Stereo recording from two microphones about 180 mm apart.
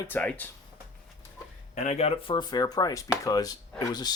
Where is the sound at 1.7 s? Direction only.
40° left (ahead or behind).